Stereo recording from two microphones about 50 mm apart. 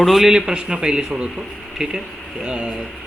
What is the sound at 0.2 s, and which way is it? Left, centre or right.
Speech, centre.